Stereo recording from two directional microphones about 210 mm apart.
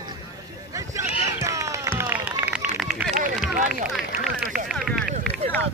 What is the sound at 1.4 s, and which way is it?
Run, 15° right (ahead or behind).